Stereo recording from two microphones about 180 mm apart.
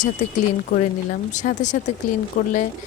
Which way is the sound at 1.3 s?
40° left (ahead or behind).